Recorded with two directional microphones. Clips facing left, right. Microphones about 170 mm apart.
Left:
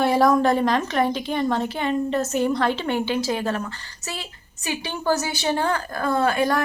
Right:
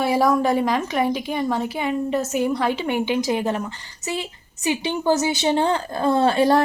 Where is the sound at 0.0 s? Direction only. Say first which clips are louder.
Left 1 dB; 5° right (ahead or behind).